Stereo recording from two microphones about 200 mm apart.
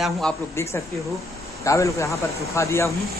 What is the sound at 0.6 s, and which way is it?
Speech, 15° left (ahead or behind).